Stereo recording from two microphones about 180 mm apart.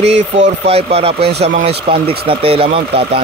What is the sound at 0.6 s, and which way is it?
Speech, 35° right (ahead or behind).